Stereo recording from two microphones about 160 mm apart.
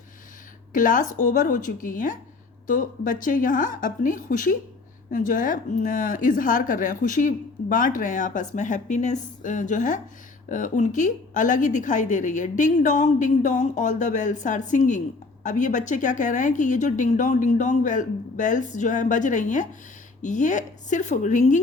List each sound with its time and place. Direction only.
0.7 s a woman's voice: 55° left (ahead or behind)